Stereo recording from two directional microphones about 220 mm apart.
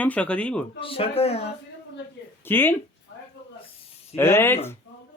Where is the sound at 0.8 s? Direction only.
25° left (ahead or behind).